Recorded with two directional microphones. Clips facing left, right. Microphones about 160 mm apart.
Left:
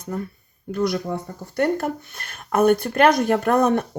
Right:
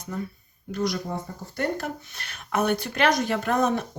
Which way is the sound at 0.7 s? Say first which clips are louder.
Left 5 dB; 60° left (ahead or behind).